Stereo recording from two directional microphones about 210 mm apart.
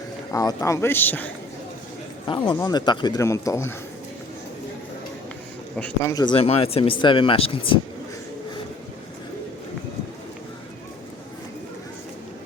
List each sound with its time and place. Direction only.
0.3 s speech: 15° left (ahead or behind)
2.2 s speech: 25° left (ahead or behind)
5.7 s speech: 10° left (ahead or behind); by 7.8 s 25° left (ahead or behind)